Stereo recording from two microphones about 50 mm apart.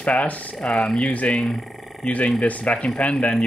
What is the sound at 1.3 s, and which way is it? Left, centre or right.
Speech, centre.